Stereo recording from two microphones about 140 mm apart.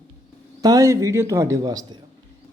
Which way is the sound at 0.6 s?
25° right (ahead or behind).